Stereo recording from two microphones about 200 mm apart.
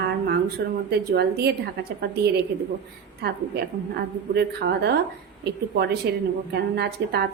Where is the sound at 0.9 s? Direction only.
55° right (ahead or behind).